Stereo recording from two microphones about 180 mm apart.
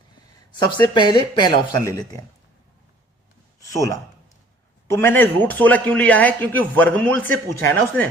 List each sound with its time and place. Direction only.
0.9 s speech: 25° left (ahead or behind)
3.6 s a man's voice: 20° left (ahead or behind)